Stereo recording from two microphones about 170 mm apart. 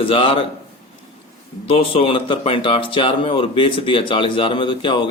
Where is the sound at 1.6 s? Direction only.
35° left (ahead or behind).